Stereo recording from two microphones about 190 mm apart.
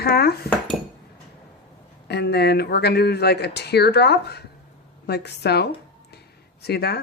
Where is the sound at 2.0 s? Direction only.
60° left (ahead or behind).